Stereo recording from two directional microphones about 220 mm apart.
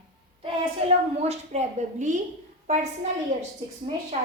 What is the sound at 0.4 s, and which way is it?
A woman's voice, 30° right (ahead or behind).